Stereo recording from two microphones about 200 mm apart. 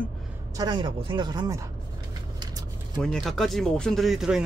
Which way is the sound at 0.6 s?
20° right (ahead or behind).